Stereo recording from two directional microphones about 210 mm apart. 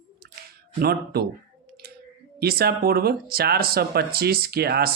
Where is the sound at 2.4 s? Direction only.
45° right (ahead or behind).